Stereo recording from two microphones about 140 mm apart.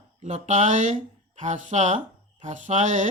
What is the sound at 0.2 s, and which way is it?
Speech, 55° right (ahead or behind).